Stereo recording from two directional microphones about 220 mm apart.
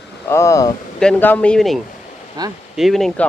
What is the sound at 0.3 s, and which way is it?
Speech, 15° left (ahead or behind).